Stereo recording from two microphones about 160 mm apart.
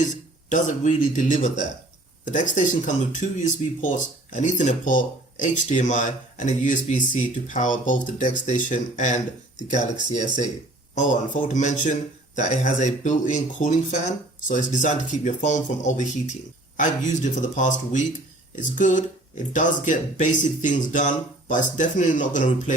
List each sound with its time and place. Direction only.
0.5 s speech: 50° left (ahead or behind)